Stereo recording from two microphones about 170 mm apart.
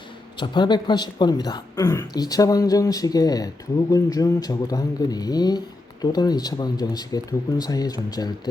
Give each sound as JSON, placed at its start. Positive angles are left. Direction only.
{"t": 0.3, "sound": "speech", "side_deg": 25}